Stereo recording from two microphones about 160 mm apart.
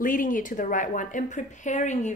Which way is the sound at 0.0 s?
55° left (ahead or behind).